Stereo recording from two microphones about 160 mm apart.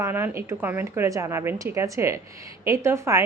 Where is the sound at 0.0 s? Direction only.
15° right (ahead or behind).